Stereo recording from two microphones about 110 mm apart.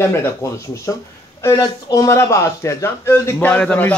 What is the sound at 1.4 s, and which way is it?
A man's voice, 25° left (ahead or behind).